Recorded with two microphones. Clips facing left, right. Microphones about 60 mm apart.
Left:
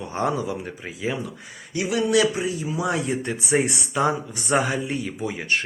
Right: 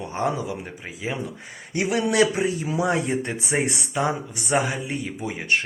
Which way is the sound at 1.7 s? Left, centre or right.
Right.